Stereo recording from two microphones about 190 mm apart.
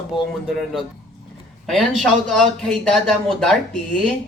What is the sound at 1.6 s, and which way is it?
Speech, centre (ahead or behind).